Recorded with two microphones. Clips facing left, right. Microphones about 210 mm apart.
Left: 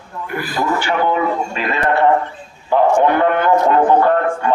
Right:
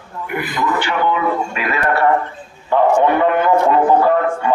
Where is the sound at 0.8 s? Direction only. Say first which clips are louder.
Left 1 dB; 45° left (ahead or behind).